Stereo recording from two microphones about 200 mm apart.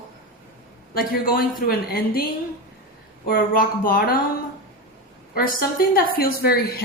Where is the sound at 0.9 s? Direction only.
45° left (ahead or behind).